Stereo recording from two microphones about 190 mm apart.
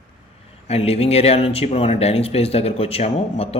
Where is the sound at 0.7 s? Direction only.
35° left (ahead or behind).